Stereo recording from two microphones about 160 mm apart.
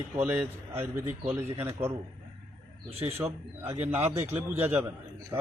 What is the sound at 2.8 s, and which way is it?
Speech, 40° right (ahead or behind).